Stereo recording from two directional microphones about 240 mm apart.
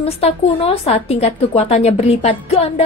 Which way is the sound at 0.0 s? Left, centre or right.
Left.